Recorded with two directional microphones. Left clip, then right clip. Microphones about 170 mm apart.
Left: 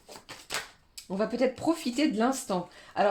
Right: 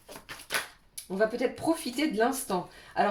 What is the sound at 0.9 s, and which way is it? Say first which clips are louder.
Speech: right 3 dB; 40° left (ahead or behind).